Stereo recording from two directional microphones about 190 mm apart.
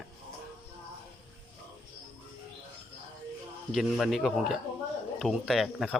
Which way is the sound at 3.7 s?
Centre (ahead or behind).